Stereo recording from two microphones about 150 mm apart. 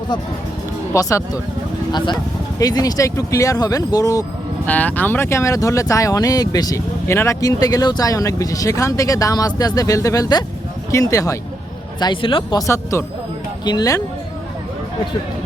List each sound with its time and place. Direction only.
0.9 s speech: 25° left (ahead or behind)
4.6 s speech: 10° left (ahead or behind); by 12.6 s 30° left (ahead or behind)
12.6 s speech: 20° left (ahead or behind)